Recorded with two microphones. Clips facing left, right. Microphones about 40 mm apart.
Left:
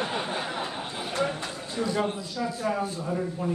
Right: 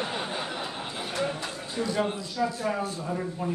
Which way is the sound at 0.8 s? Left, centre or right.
Centre.